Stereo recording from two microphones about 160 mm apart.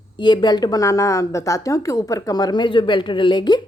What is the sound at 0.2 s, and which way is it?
A woman's voice, 30° left (ahead or behind).